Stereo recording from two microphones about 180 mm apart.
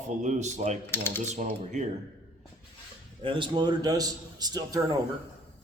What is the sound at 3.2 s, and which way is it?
A man's voice, 25° right (ahead or behind).